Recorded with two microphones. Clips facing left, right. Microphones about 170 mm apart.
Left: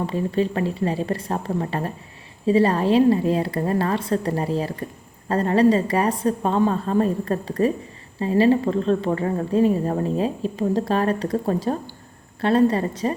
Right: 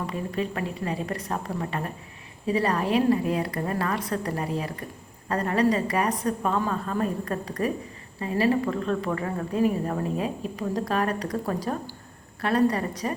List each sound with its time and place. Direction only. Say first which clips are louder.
0.0 s a woman's voice: left 7 dB; 30° left (ahead or behind)